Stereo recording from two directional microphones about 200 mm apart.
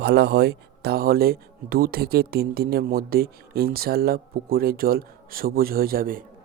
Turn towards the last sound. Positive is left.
turn(degrees=-45)  # may be behind; listen again after turning